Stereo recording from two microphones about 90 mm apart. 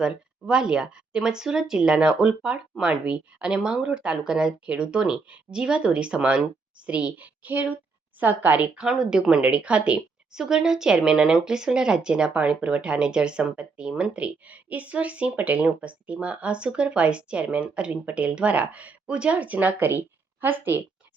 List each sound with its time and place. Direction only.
0.4 s a woman's voice: 10° right (ahead or behind)